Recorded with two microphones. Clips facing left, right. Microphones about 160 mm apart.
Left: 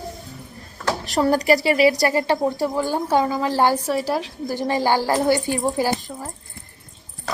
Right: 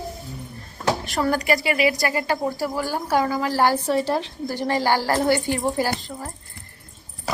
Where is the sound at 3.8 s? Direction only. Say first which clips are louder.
Right 1 dB; 5° left (ahead or behind).